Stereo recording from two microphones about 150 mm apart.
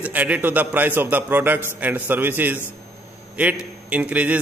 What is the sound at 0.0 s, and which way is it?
A man's voice, 10° right (ahead or behind).